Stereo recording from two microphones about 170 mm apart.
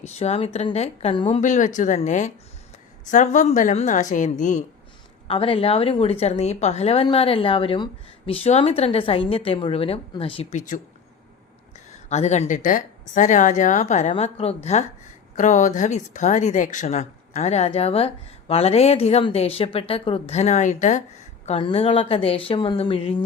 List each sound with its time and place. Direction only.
0.0 s speech: 40° left (ahead or behind)
1.4 s a woman's voice: 45° left (ahead or behind)
5.3 s speech: 35° left (ahead or behind)
10.5 s a woman's voice: 45° left (ahead or behind)
12.0 s a woman's voice: 40° left (ahead or behind)